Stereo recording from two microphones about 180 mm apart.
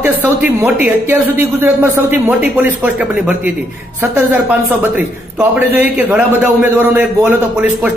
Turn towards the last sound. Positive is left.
turn(degrees=-5)  # may be behind; listen again after turning